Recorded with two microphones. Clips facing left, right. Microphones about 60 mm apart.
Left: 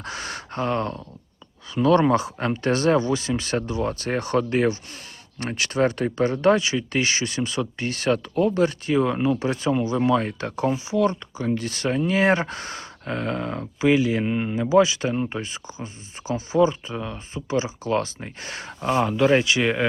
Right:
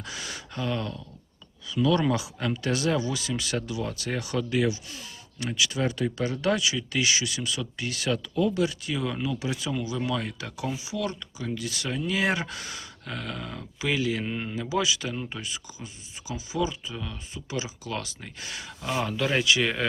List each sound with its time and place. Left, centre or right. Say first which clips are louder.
0.0 s speech: left 5 dB; left; by 14.5 s centre
14.6 s speech: left 10 dB; left
18.9 s speech: left 8 dB; left